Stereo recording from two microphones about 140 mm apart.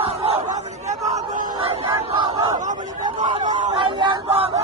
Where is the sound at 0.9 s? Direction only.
60° right (ahead or behind).